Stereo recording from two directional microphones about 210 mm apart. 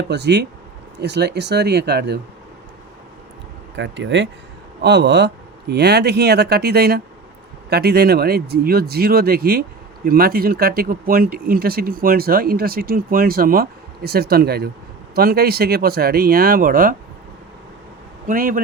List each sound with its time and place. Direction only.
0.1 s speech: 55° right (ahead or behind)
3.8 s speech: 60° right (ahead or behind); by 16.9 s 45° right (ahead or behind)
18.3 s a man's voice: 40° right (ahead or behind)